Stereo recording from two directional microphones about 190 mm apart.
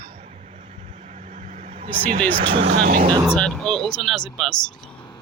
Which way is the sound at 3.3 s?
5° left (ahead or behind).